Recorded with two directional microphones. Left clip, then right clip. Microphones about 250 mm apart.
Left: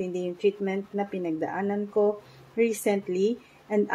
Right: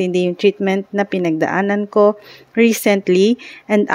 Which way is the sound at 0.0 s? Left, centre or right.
Right.